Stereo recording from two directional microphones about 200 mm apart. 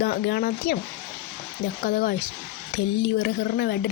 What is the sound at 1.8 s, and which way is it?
Speech, 50° left (ahead or behind).